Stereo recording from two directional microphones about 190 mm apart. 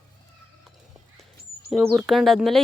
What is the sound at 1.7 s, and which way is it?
Speech, centre (ahead or behind).